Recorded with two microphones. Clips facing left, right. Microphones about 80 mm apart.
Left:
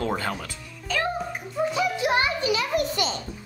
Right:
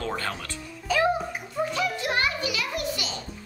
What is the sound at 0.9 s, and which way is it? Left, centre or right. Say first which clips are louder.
Speech: right 3 dB; centre.